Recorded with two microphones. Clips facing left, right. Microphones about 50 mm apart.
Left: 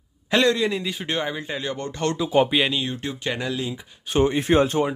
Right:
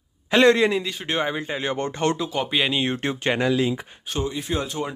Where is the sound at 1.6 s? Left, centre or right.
Right.